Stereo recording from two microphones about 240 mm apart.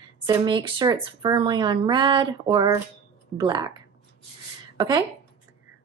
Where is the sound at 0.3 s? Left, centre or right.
Centre.